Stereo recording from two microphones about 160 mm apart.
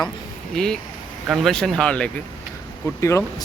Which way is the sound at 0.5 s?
5° left (ahead or behind).